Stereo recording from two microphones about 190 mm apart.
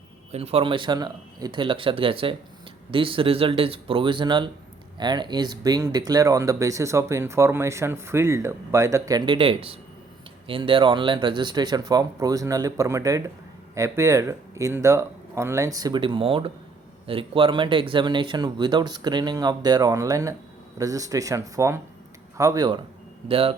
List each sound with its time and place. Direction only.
0.3 s speech: 35° right (ahead or behind)